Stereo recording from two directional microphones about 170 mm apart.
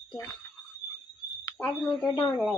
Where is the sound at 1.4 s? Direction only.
15° left (ahead or behind).